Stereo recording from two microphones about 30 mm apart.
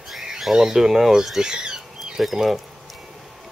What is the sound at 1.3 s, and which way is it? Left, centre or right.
Squawk, right.